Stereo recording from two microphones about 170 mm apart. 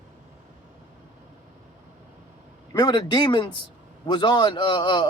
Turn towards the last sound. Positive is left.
turn(degrees=30)  # may be behind; listen again after turning